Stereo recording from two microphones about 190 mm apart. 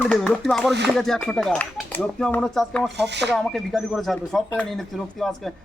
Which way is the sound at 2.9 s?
65° right (ahead or behind).